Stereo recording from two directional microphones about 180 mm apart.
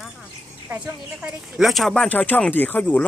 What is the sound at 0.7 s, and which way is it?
Speech, 10° right (ahead or behind).